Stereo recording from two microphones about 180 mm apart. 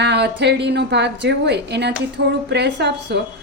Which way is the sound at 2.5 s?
70° right (ahead or behind).